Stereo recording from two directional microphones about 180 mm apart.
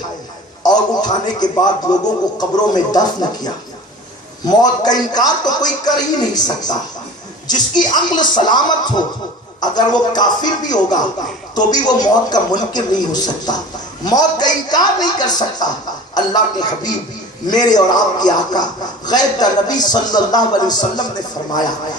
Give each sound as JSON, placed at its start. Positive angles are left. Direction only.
{"t": 0.6, "sound": "a man's voice", "side_deg": 20}